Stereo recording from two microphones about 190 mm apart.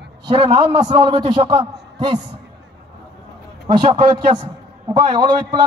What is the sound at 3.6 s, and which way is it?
A man's voice, 25° right (ahead or behind).